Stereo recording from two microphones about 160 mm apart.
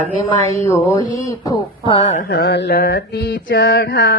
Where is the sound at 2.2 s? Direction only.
85° left.